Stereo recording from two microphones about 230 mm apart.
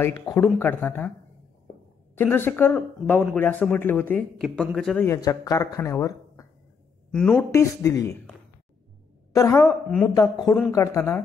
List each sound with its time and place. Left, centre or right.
0.0 s speech: centre
2.1 s speech: centre
9.3 s speech: centre